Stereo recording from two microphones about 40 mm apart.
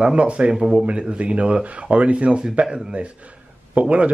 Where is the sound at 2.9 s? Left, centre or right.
Right.